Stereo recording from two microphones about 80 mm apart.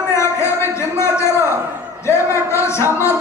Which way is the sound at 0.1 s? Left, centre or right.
Left.